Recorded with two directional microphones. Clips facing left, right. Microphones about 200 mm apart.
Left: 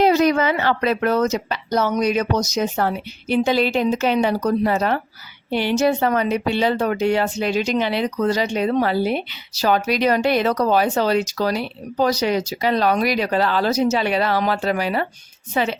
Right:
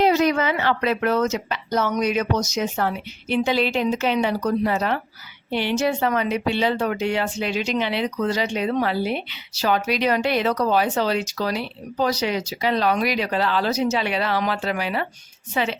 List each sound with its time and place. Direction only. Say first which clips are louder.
0.0 s a woman's voice: left 3 dB; 40° left (ahead or behind)